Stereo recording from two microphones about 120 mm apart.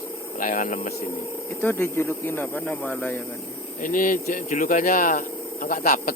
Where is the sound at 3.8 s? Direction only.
90° left.